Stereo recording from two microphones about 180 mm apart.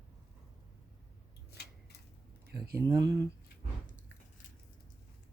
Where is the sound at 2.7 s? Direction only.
20° right (ahead or behind).